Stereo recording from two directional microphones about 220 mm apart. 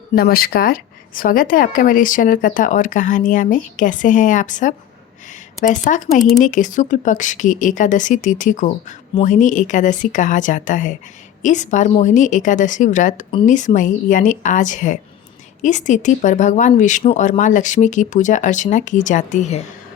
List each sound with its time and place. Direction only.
0.2 s a woman's voice: 45° left (ahead or behind)